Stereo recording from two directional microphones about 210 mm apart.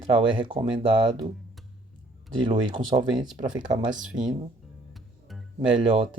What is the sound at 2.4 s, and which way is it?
Speech, 25° right (ahead or behind).